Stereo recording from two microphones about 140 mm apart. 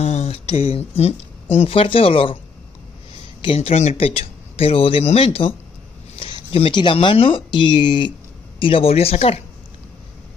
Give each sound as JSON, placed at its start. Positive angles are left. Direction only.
{"t": 0.0, "sound": "speech", "side_deg": 50}
{"t": 3.4, "sound": "speech", "side_deg": 45}